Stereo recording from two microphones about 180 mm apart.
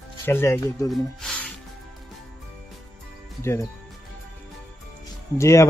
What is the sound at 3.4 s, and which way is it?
Speech, 15° left (ahead or behind).